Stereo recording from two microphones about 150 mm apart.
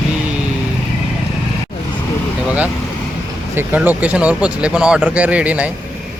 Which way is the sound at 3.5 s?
10° right (ahead or behind).